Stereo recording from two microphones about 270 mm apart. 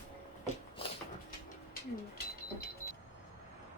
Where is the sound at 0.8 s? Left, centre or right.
Centre.